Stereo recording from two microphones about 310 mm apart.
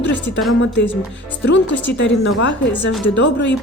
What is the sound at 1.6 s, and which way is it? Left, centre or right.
Speech, left.